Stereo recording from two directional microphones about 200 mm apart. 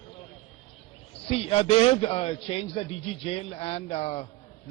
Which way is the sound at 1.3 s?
30° left (ahead or behind).